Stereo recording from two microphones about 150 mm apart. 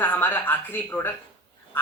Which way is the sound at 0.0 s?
15° left (ahead or behind).